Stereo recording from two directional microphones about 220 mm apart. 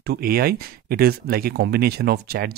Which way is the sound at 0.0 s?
45° right (ahead or behind).